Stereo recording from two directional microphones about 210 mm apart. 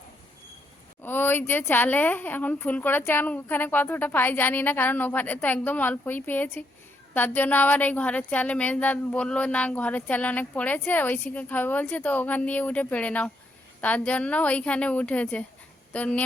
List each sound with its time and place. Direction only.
1.0 s speech: 10° left (ahead or behind)